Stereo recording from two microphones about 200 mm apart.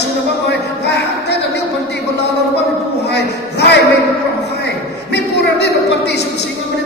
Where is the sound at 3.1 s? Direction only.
55° left (ahead or behind).